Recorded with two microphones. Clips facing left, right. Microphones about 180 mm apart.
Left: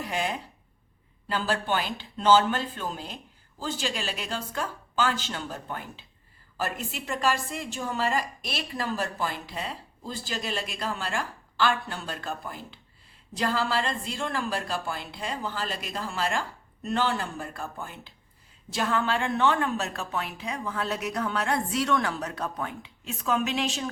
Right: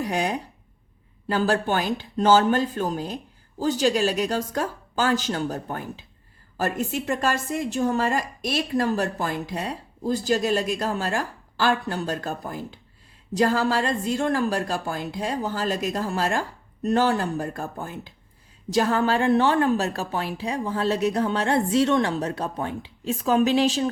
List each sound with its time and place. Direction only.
0.1 s a woman's voice: 45° right (ahead or behind)